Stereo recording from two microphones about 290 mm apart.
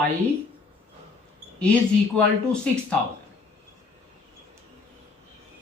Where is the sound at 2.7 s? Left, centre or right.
Centre.